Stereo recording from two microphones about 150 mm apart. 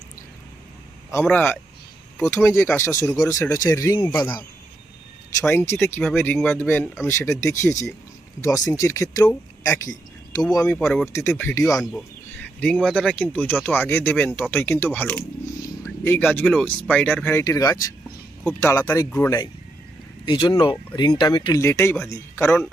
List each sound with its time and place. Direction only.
1.1 s speech: 10° left (ahead or behind)
5.5 s speech: 15° left (ahead or behind)
11.9 s speech: 5° left (ahead or behind)
17.4 s speech: 25° left (ahead or behind)
18.4 s speech: 15° left (ahead or behind)
20.2 s speech: 30° left (ahead or behind)
21.6 s a man's voice: 15° left (ahead or behind)